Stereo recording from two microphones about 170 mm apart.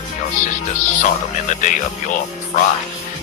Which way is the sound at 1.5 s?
45° left (ahead or behind).